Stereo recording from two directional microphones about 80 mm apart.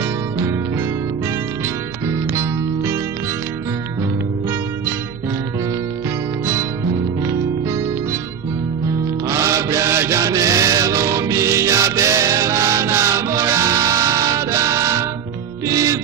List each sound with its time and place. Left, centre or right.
2.0 s music: right
9.3 s chant: right
15.6 s music: right